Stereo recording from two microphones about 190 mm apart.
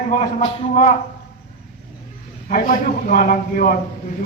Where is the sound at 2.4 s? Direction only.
45° left (ahead or behind).